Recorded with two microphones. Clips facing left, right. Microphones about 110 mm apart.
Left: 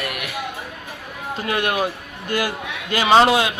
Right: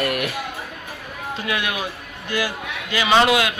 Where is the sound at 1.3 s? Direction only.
45° left (ahead or behind).